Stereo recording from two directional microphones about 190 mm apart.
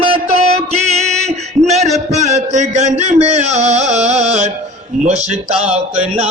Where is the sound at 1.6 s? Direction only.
35° right (ahead or behind).